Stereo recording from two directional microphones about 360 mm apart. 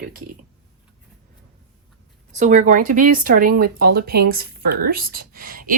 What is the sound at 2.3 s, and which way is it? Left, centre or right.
Speech, centre.